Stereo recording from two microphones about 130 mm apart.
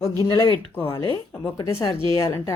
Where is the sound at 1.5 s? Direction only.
30° left (ahead or behind).